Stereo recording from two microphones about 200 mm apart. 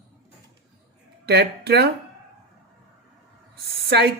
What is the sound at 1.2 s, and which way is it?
Speech, 55° right (ahead or behind).